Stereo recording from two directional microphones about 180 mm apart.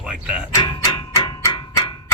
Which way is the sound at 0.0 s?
5° right (ahead or behind).